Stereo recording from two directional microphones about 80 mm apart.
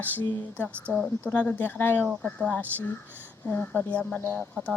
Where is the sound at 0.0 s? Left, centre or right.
Left.